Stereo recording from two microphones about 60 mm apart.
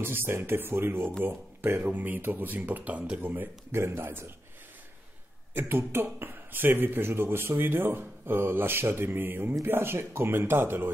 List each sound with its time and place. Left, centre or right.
0.0 s speech: right
3.2 s speech: right
5.5 s speech: right